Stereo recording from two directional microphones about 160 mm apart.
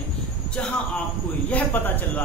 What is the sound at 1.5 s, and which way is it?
Speech, 10° left (ahead or behind).